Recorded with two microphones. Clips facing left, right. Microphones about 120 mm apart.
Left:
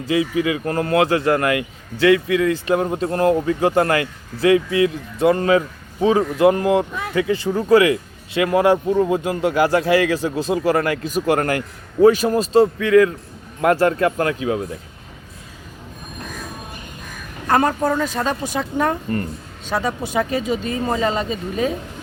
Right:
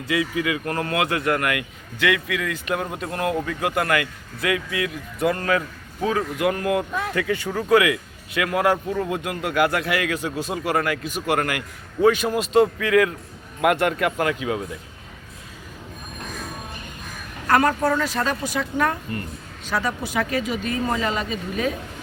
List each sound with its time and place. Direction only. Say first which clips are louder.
0.0 s a man's voice: left 5 dB; 30° left (ahead or behind)
17.4 s speech: left 1 dB; 20° left (ahead or behind)